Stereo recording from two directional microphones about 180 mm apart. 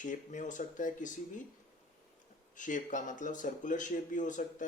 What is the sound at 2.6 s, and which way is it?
Speech, 45° left (ahead or behind).